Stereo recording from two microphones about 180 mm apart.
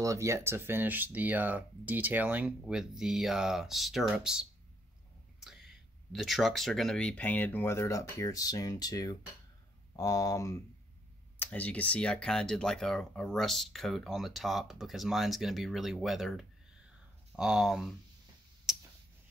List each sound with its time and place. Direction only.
0.0 s speech: 15° right (ahead or behind)
5.4 s whispering: centre (ahead or behind)
6.1 s speech: centre (ahead or behind)
18.7 s clicking: 5° right (ahead or behind)